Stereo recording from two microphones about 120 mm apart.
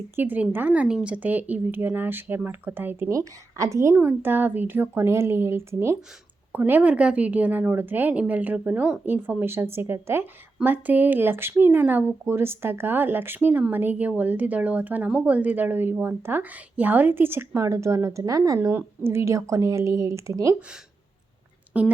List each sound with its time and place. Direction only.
0.2 s a woman's voice: 15° right (ahead or behind)
21.7 s speech: 10° right (ahead or behind)